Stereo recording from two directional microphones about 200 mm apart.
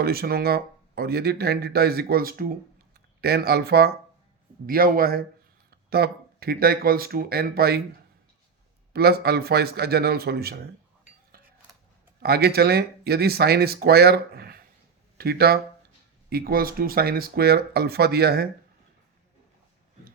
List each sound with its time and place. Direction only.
0.0 s speech: 50° right (ahead or behind)
8.9 s speech: 50° right (ahead or behind)
12.2 s speech: 50° right (ahead or behind)